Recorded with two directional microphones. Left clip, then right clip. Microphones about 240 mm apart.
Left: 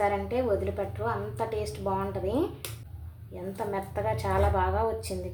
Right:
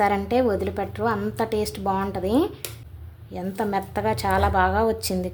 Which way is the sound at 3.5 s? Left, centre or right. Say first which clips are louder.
Right 6 dB; right.